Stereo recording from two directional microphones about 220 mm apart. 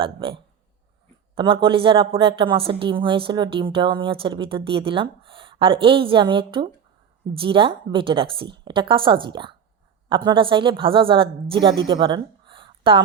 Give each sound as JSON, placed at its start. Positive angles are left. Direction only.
{"t": 0.0, "sound": "a woman's voice", "side_deg": -25}